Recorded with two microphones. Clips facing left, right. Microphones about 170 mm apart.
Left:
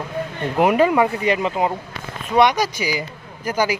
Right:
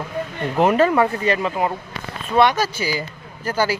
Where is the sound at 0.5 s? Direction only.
10° left (ahead or behind).